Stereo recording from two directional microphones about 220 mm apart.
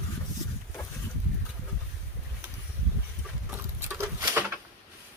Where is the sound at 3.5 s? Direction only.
10° right (ahead or behind).